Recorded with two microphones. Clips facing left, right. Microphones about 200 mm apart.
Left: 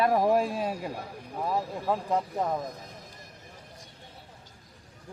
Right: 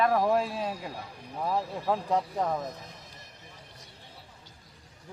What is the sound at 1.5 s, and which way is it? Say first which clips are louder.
Speech: even; centre (ahead or behind).